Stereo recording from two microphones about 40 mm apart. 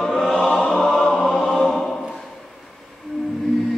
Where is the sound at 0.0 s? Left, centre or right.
Centre.